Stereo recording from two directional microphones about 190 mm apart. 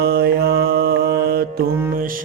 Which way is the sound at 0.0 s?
55° right (ahead or behind).